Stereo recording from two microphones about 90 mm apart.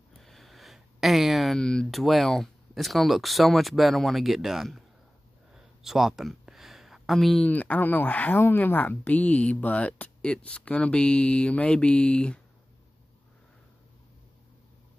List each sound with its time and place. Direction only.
0.2 s speech: centre (ahead or behind)
5.5 s a sound: 5° right (ahead or behind)
7.4 s speech: 15° left (ahead or behind)